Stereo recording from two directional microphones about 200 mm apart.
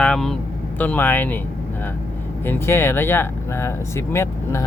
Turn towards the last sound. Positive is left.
turn(degrees=15)  # may be behind; listen again after turning